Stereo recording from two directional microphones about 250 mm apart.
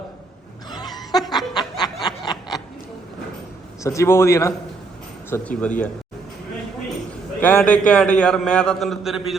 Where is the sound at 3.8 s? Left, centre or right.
Centre.